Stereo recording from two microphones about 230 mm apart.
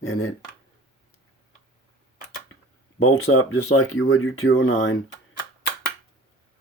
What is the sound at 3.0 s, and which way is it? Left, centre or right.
Speech, left.